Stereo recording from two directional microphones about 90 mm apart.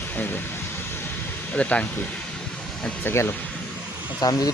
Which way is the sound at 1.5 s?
15° left (ahead or behind).